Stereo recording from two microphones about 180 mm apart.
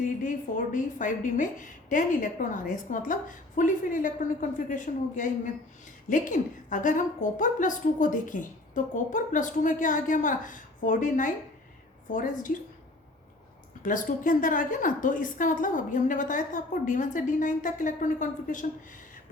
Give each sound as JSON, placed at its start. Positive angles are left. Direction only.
{"t": 0.0, "sound": "a woman's voice", "side_deg": 45}
{"t": 13.8, "sound": "a woman's voice", "side_deg": 45}